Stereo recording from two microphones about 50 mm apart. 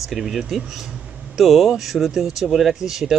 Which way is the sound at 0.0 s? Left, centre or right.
Centre.